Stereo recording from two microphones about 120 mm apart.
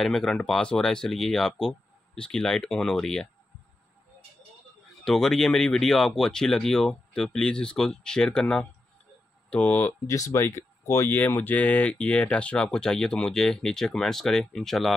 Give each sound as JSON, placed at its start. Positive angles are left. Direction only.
{"t": 0.0, "sound": "speech", "side_deg": 5}
{"t": 5.0, "sound": "speech", "side_deg": 5}
{"t": 10.0, "sound": "speech", "side_deg": 25}
{"t": 11.1, "sound": "speech", "side_deg": 15}